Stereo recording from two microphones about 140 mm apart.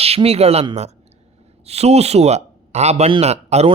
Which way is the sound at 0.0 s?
45° right (ahead or behind).